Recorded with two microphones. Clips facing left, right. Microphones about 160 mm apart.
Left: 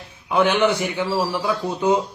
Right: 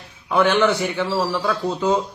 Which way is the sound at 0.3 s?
10° left (ahead or behind).